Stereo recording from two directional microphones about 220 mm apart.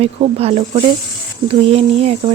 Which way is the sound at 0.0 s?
25° right (ahead or behind).